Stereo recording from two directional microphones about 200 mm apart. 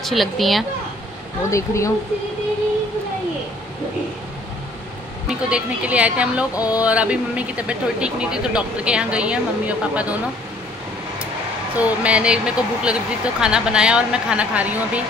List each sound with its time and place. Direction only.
0.0 s speech: centre (ahead or behind)
1.5 s speech: 15° left (ahead or behind)
5.5 s speech: 5° right (ahead or behind)
6.5 s speech: 20° left (ahead or behind)
6.8 s speech: 5° right (ahead or behind)
11.7 s speech: 5° right (ahead or behind)